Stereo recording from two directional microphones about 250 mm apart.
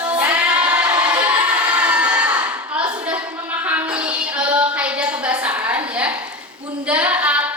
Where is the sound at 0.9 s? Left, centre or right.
Centre.